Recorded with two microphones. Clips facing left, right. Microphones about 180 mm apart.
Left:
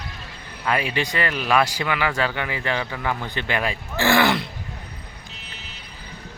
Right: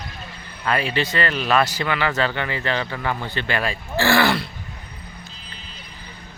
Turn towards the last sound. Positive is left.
turn(degrees=80)